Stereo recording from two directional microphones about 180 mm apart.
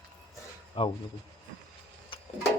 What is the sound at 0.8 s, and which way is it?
Speech, 30° left (ahead or behind).